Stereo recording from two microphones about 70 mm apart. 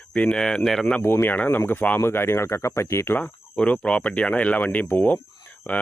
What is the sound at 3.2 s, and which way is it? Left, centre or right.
Speech, centre.